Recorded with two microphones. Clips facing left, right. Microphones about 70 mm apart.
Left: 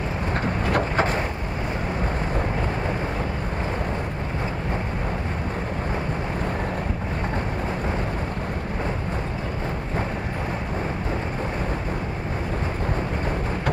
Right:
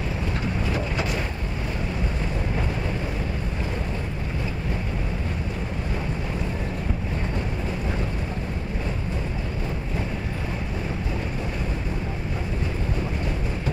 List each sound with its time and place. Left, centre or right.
0.9 s vehicle: left